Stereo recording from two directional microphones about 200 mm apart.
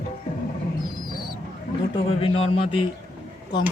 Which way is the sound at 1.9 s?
30° left (ahead or behind).